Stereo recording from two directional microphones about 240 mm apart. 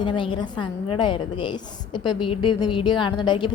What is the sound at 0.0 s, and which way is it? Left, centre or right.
A woman's voice, left.